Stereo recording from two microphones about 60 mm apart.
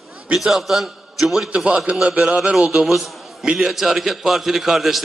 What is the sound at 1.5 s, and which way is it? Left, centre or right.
A man's voice, centre.